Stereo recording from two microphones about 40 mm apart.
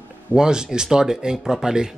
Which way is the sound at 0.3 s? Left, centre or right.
Centre.